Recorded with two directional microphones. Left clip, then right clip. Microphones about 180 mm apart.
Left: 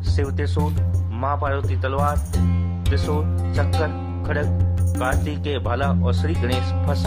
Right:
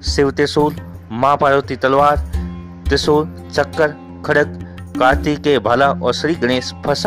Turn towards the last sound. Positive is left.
turn(degrees=-50)  # may be behind; listen again after turning